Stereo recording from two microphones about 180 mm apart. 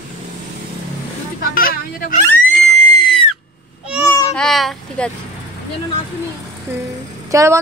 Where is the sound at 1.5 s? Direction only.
50° left (ahead or behind).